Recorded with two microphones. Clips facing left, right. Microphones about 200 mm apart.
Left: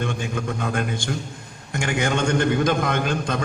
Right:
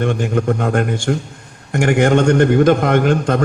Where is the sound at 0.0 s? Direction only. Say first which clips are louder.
Right 9 dB; 55° right (ahead or behind).